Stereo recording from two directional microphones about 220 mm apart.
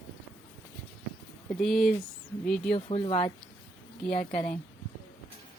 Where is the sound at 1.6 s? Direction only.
Centre (ahead or behind).